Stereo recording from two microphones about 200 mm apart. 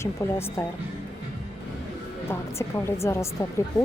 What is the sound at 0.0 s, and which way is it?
Speech, 15° left (ahead or behind).